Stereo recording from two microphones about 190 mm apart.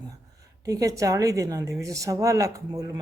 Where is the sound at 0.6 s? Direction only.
20° right (ahead or behind).